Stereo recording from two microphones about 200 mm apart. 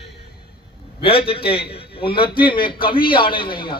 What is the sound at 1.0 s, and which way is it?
A man's voice, 25° left (ahead or behind).